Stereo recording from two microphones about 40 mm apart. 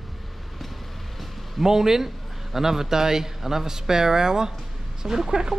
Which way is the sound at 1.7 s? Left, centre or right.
Centre.